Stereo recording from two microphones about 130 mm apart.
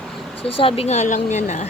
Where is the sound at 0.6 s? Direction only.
45° left (ahead or behind); by 1.7 s 60° left (ahead or behind).